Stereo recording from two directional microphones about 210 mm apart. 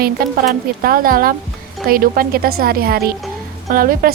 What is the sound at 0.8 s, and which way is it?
A woman's voice, 45° right (ahead or behind).